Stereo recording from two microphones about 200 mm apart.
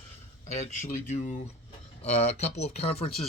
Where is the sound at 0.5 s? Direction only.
35° left (ahead or behind).